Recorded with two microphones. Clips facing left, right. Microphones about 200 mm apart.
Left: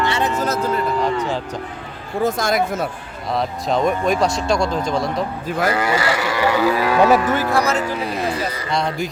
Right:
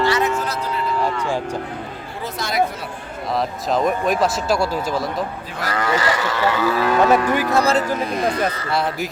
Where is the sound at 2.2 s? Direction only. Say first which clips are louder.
Left 3 dB; 45° left (ahead or behind).